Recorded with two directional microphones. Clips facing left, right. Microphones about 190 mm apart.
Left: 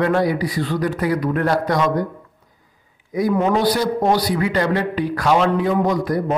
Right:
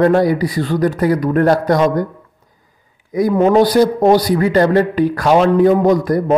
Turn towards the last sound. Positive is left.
turn(degrees=-45)  # may be behind; listen again after turning